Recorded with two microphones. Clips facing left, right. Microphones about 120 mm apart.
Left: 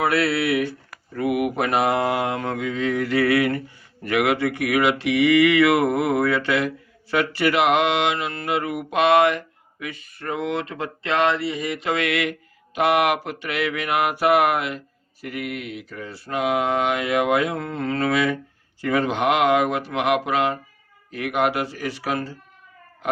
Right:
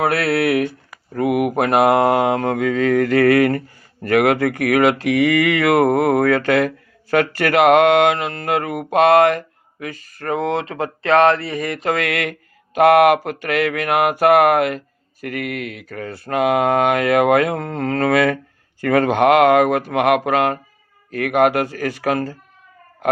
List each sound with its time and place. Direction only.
0.0 s mantra: 55° right (ahead or behind)
9.8 s speech: 40° right (ahead or behind)
11.0 s mantra: 55° right (ahead or behind)